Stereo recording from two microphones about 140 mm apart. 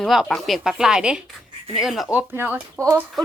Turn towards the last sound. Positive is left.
turn(degrees=-20)  # may be behind; listen again after turning